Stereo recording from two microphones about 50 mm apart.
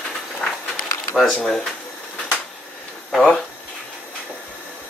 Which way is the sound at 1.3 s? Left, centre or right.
Centre.